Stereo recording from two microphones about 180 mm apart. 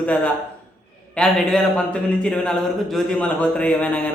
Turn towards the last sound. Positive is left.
turn(degrees=5)  # may be behind; listen again after turning